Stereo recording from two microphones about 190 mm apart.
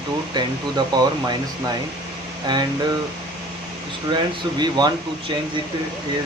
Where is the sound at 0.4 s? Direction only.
25° right (ahead or behind).